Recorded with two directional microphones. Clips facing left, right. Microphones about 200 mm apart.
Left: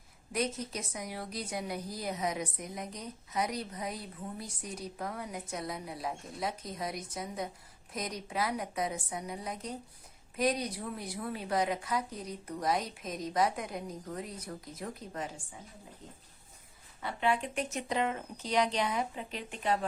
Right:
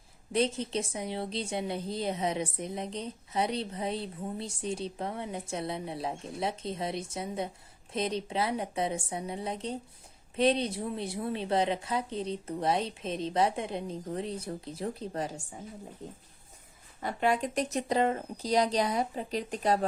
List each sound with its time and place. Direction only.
0.3 s a woman's voice: 30° right (ahead or behind)
17.0 s speech: 45° right (ahead or behind)